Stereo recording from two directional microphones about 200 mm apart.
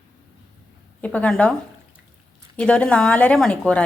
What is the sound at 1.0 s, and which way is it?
Speech, 5° left (ahead or behind).